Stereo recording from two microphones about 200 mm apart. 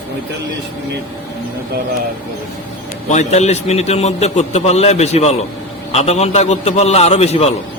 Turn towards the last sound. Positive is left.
turn(degrees=30)  # may be behind; listen again after turning